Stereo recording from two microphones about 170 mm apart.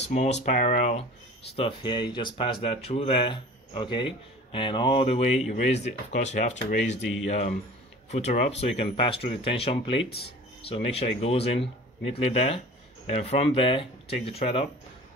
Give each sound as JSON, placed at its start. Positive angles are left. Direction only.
{"t": 0.0, "sound": "speech", "side_deg": 40}
{"t": 1.5, "sound": "speech", "side_deg": 30}
{"t": 7.0, "sound": "speech", "side_deg": 0}
{"t": 7.2, "sound": "speech", "side_deg": 45}
{"t": 10.0, "sound": "speech", "side_deg": 70}
{"t": 10.6, "sound": "speech", "side_deg": 35}